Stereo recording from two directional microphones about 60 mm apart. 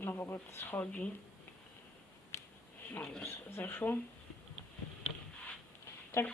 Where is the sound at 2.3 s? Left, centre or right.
Left.